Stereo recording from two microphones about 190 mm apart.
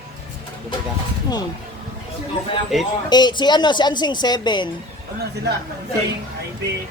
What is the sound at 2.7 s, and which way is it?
Speech, centre (ahead or behind).